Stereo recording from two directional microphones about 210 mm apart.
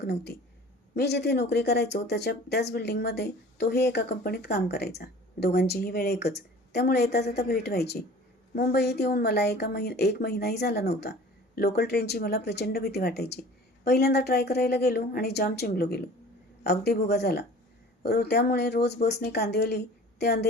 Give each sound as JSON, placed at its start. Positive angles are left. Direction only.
{"t": 0.0, "sound": "speech", "side_deg": 50}